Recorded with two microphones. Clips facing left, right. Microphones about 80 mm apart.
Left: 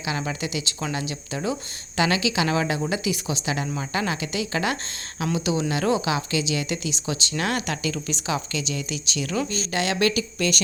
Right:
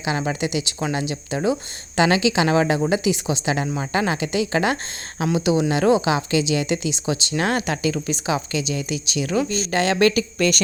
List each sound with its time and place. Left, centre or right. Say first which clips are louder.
0.0 s a woman's voice: right 5 dB; right
9.7 s speech: right 5 dB; right